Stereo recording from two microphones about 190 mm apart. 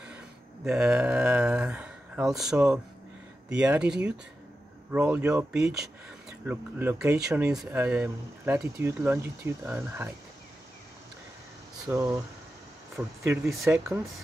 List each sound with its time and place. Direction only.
0.7 s speech: 5° right (ahead or behind)
11.9 s speech: 10° right (ahead or behind)